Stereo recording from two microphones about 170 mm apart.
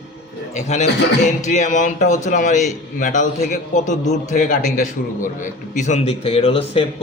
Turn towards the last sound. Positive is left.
turn(degrees=35)  # may be behind; listen again after turning